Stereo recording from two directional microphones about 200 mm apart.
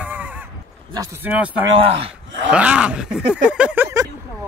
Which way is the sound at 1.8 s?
30° right (ahead or behind).